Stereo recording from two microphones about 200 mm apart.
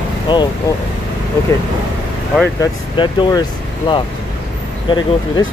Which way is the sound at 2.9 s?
25° left (ahead or behind).